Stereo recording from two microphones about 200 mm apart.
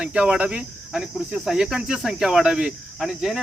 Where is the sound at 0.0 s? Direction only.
5° right (ahead or behind).